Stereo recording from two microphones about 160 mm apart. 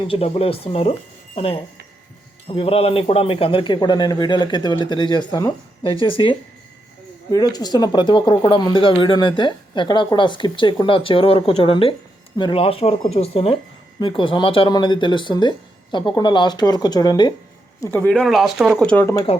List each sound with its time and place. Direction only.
0.0 s speech: 35° left (ahead or behind); by 18.1 s 15° left (ahead or behind)
18.1 s speech: centre (ahead or behind)